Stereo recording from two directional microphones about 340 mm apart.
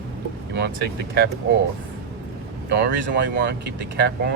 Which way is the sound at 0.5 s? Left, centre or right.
Right.